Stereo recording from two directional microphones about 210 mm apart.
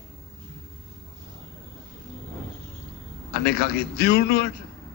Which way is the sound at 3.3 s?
50° left (ahead or behind).